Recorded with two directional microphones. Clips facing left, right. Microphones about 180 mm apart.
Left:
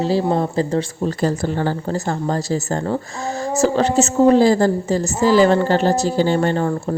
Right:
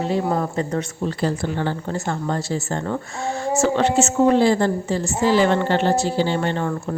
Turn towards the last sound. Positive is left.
turn(degrees=35)  # may be behind; listen again after turning